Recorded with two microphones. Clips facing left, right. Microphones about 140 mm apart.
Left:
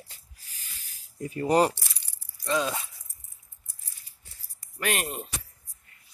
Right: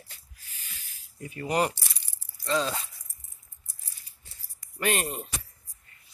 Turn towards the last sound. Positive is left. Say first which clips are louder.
# right 2 dB
turn(degrees=0)  # may be behind; listen again after turning